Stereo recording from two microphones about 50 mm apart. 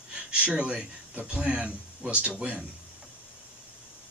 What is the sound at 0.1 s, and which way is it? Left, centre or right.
Speech, right.